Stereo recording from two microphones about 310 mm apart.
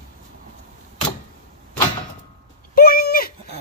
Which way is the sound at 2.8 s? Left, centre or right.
Left.